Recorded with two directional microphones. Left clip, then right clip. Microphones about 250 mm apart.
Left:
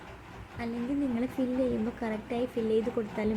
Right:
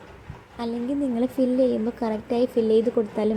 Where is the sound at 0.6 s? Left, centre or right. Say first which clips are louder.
Right 7 dB; centre.